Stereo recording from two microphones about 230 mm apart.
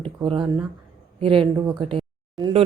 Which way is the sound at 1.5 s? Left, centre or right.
Centre.